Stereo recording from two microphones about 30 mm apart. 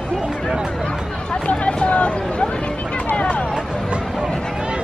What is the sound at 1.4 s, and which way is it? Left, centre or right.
Speech, left.